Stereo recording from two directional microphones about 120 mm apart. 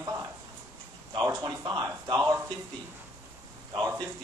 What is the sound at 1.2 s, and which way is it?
A man's voice, 30° right (ahead or behind).